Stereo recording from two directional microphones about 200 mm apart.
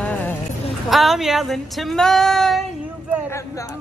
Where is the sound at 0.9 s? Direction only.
Centre (ahead or behind).